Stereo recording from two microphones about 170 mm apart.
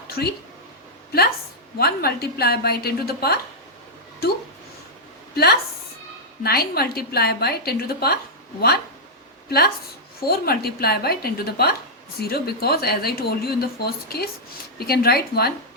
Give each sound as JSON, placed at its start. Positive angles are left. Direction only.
{"t": 0.1, "sound": "speech", "side_deg": 70}
{"t": 1.8, "sound": "speech", "side_deg": 65}
{"t": 5.3, "sound": "a woman's voice", "side_deg": 65}
{"t": 9.5, "sound": "speech", "side_deg": 65}